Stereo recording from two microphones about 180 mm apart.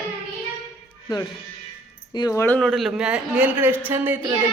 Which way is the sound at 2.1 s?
20° left (ahead or behind).